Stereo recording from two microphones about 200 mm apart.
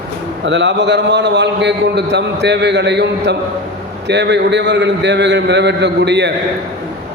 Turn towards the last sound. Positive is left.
turn(degrees=-60)  # may be behind; listen again after turning